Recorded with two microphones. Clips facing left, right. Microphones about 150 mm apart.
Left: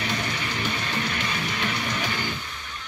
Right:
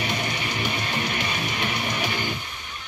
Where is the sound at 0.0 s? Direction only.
15° right (ahead or behind).